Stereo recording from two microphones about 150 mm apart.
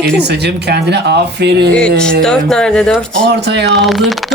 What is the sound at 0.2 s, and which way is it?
Speech, 90° right.